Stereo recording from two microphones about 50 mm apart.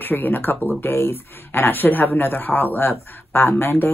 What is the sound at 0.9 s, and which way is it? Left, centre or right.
Speech, left.